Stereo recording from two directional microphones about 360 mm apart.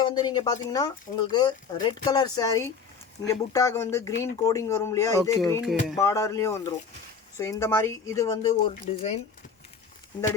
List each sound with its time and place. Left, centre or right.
0.0 s speech: centre